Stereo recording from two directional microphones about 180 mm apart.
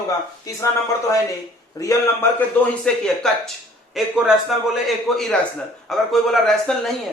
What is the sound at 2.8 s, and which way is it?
A man's voice, 5° left (ahead or behind).